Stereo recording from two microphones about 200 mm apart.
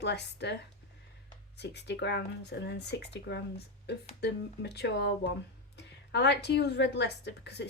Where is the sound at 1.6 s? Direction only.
60° left (ahead or behind).